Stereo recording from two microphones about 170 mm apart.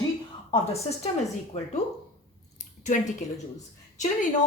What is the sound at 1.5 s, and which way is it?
Speech, 35° left (ahead or behind).